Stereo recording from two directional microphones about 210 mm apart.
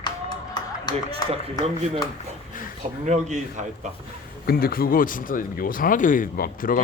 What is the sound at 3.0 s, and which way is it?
Speech, 35° right (ahead or behind).